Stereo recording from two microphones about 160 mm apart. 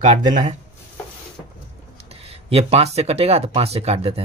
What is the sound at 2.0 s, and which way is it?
Speech, 40° right (ahead or behind).